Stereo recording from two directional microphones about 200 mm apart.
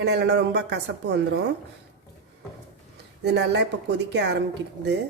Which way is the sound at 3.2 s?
60° right (ahead or behind).